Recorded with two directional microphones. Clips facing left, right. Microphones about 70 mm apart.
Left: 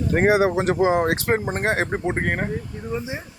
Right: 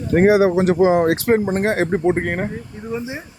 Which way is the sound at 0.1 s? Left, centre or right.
Left.